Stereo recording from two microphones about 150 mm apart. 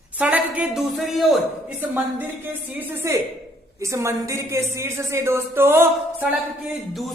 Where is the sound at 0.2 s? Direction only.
10° right (ahead or behind).